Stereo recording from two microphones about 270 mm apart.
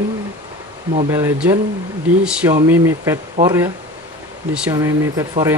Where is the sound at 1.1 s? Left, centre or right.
Centre.